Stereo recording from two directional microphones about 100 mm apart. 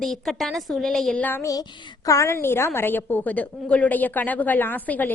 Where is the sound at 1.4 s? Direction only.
35° left (ahead or behind).